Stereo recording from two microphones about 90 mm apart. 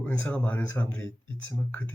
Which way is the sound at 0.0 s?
15° left (ahead or behind).